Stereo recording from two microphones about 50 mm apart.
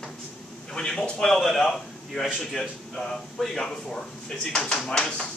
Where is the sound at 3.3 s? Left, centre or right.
Centre.